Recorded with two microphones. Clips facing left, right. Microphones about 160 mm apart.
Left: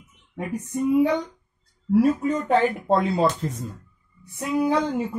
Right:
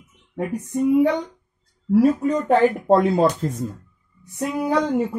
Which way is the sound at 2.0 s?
40° right (ahead or behind).